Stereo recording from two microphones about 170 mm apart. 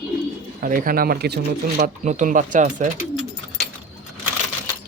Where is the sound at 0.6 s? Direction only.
55° right (ahead or behind); by 1.8 s 70° right (ahead or behind).